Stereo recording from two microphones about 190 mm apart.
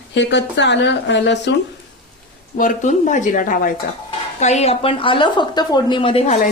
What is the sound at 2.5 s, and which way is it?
Speech, 45° left (ahead or behind).